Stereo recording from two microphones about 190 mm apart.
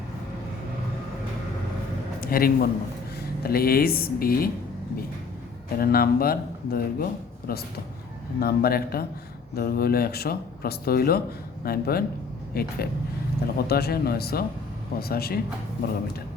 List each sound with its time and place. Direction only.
2.2 s a man's voice: 50° left (ahead or behind)
5.7 s speech: 50° left (ahead or behind)